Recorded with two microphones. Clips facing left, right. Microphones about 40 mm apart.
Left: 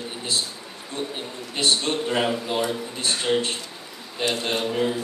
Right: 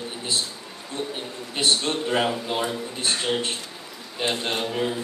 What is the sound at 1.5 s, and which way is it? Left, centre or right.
A man's voice, centre.